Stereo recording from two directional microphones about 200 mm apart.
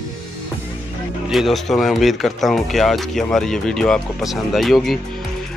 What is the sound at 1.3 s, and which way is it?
Speech, centre (ahead or behind).